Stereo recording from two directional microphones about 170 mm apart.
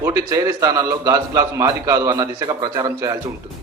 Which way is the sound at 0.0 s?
20° right (ahead or behind).